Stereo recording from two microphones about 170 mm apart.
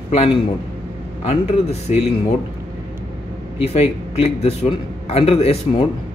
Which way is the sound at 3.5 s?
35° left (ahead or behind).